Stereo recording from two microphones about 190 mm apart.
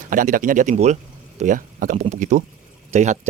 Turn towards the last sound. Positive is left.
turn(degrees=-40)  # may be behind; listen again after turning